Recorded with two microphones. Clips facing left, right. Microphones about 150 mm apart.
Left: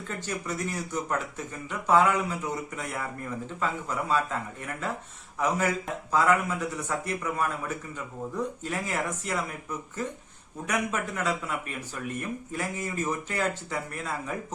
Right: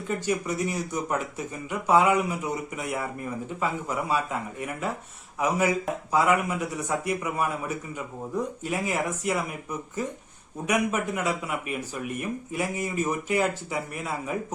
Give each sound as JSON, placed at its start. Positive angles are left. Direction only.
{"t": 0.3, "sound": "speech", "side_deg": -10}